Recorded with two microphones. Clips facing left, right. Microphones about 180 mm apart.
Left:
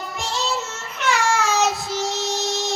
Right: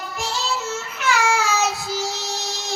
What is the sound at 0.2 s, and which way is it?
Child singing, centre (ahead or behind).